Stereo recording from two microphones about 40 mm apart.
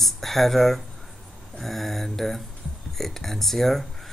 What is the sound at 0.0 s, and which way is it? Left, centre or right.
Speech, centre.